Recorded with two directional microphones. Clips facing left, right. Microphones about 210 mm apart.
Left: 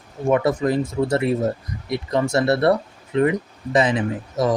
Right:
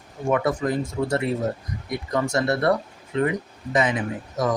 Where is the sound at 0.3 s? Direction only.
25° left (ahead or behind).